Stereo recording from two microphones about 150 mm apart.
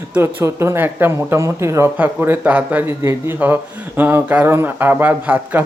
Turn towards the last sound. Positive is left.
turn(degrees=-10)  # may be behind; listen again after turning